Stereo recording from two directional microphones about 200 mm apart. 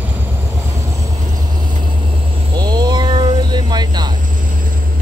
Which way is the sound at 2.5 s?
20° right (ahead or behind).